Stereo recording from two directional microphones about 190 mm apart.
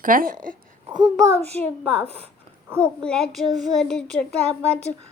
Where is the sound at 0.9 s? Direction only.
20° right (ahead or behind).